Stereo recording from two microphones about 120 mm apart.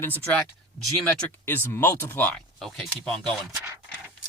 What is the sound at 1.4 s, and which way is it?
Speech, 20° left (ahead or behind).